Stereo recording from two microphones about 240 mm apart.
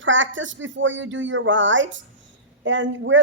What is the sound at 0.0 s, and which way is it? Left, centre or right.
A woman's voice, right.